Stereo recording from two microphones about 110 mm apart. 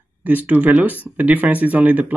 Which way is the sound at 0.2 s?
15° right (ahead or behind).